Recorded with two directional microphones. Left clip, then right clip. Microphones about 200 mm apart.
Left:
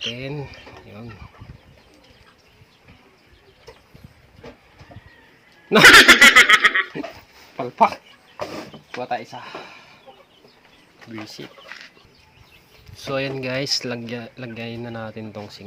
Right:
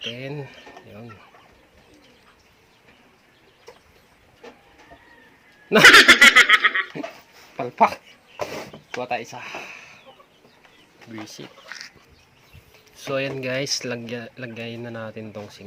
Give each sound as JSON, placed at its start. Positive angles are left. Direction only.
{"t": 0.1, "sound": "speech", "side_deg": 5}
{"t": 5.6, "sound": "laughter", "side_deg": 0}
{"t": 7.5, "sound": "a sound", "side_deg": -15}
{"t": 9.0, "sound": "speech", "side_deg": -25}
{"t": 11.1, "sound": "speech", "side_deg": 0}
{"t": 13.0, "sound": "speech", "side_deg": 0}